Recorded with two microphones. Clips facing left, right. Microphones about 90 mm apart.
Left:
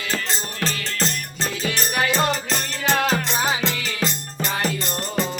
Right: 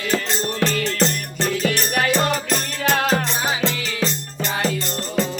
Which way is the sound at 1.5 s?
55° right (ahead or behind).